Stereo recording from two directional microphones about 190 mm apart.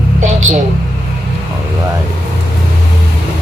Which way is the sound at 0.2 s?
40° right (ahead or behind).